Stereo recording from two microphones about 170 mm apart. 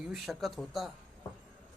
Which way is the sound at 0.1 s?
Centre (ahead or behind).